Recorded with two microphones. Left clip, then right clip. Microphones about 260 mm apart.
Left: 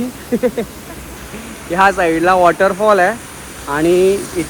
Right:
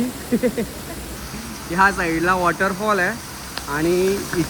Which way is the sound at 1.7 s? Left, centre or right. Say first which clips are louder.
Left 5 dB; centre.